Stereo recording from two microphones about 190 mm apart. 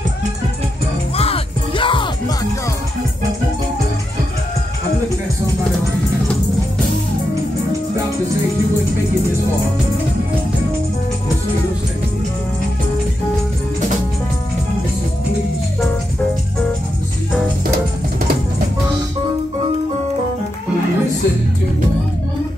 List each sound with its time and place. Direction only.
1.1 s music: 30° left (ahead or behind)